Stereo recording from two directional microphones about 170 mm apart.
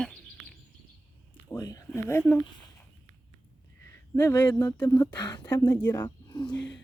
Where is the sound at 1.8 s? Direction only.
15° left (ahead or behind).